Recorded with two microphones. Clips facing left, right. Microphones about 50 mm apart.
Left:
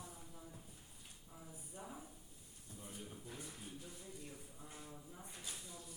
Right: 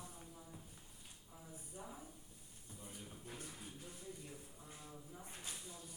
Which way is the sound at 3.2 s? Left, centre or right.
Right.